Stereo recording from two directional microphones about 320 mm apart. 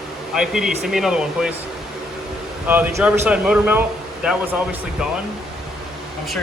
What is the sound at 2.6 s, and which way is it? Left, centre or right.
Speech, centre.